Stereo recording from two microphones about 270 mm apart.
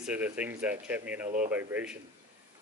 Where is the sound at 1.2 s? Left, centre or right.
Right.